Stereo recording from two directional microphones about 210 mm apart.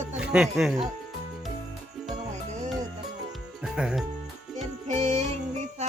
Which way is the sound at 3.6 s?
5° right (ahead or behind).